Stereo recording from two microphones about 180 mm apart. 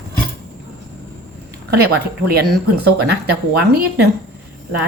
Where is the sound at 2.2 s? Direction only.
60° right (ahead or behind).